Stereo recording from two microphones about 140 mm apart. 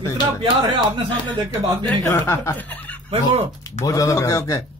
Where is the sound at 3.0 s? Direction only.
45° right (ahead or behind).